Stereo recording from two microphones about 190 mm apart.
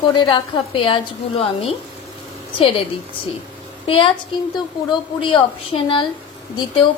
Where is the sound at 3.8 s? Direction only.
30° left (ahead or behind).